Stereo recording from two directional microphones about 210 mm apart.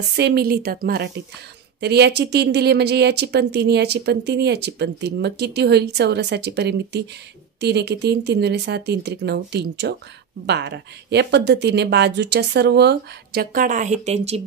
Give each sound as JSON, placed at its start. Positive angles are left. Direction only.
{"t": 0.1, "sound": "speech", "side_deg": -50}